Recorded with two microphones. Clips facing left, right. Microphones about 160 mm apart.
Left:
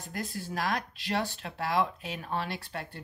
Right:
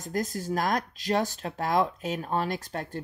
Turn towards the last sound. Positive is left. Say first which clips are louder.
# right 6 dB
turn(degrees=-45)  # may be behind; listen again after turning